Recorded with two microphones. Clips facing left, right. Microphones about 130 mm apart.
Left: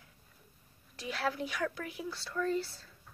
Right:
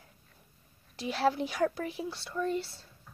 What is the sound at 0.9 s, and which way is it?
Speech, 30° right (ahead or behind).